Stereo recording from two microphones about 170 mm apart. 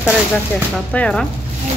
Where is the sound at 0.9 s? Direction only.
5° left (ahead or behind).